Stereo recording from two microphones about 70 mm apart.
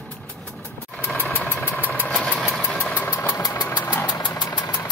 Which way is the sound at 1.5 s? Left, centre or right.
Left.